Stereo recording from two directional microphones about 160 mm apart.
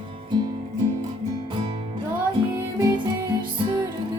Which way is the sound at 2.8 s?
25° right (ahead or behind).